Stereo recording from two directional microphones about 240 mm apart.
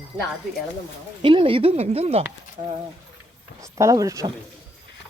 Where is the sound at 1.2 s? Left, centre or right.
Right.